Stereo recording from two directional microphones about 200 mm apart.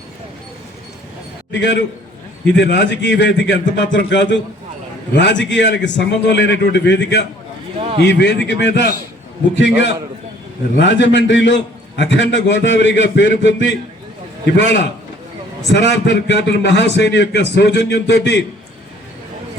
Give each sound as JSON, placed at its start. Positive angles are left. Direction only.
{"t": 1.5, "sound": "a man's voice", "side_deg": 60}
{"t": 7.8, "sound": "a man's voice", "side_deg": -30}
{"t": 8.0, "sound": "a man's voice", "side_deg": 60}
{"t": 15.9, "sound": "a man's voice", "side_deg": 60}